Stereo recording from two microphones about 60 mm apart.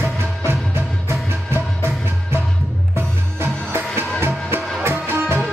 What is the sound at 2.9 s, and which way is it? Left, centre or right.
Music, right.